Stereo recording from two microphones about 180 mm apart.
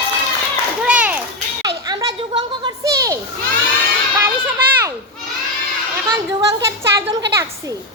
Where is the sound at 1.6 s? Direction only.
20° right (ahead or behind).